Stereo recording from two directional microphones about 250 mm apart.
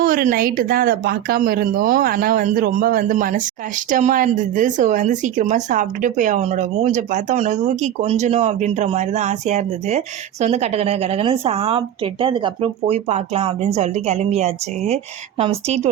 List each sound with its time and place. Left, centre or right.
0.0 s speech: right